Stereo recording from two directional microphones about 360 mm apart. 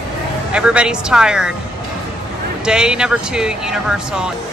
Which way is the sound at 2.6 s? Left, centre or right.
Centre.